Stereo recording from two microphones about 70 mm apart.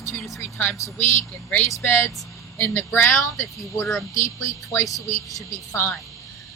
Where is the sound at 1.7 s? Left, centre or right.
Left.